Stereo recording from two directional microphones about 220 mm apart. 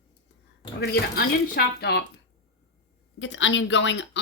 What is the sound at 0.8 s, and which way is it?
Speech, 45° left (ahead or behind).